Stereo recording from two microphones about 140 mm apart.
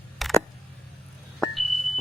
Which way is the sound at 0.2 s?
Centre (ahead or behind).